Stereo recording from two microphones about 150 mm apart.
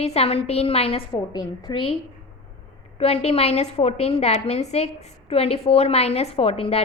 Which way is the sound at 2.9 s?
40° left (ahead or behind).